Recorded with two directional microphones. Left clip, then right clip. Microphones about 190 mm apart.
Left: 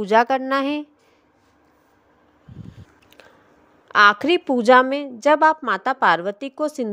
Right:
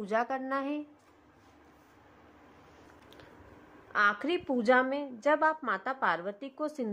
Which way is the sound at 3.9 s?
40° left (ahead or behind).